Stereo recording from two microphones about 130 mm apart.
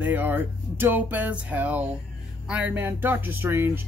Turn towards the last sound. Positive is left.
turn(degrees=-15)  # may be behind; listen again after turning